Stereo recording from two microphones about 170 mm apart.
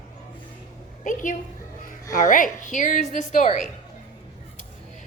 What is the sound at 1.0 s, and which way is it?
A woman's voice, 50° left (ahead or behind).